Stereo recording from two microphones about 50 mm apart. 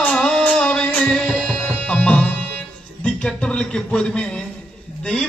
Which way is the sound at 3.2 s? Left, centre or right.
Centre.